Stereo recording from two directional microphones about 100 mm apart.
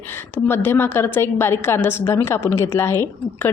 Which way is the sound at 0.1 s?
20° left (ahead or behind).